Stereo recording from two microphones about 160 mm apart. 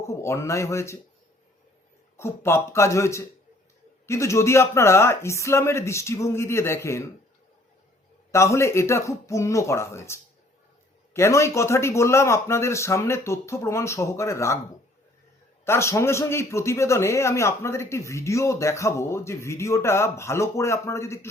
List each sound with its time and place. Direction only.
0.1 s speech: 15° left (ahead or behind)
2.1 s speech: 15° left (ahead or behind)
8.3 s speech: 20° left (ahead or behind)
15.6 s speech: 15° left (ahead or behind)